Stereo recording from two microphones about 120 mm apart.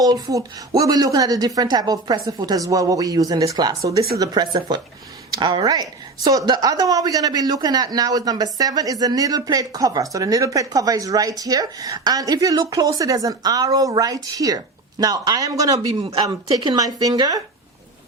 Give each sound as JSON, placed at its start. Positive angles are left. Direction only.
{"t": 0.0, "sound": "a woman's voice", "side_deg": -30}